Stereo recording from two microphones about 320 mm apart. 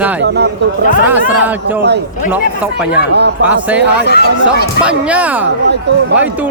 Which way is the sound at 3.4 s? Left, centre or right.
Centre.